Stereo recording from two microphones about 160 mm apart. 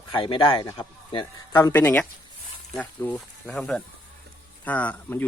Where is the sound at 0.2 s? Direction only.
35° left (ahead or behind).